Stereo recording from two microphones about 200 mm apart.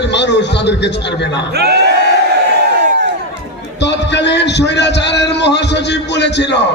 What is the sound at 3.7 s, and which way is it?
A man's voice, 60° left (ahead or behind).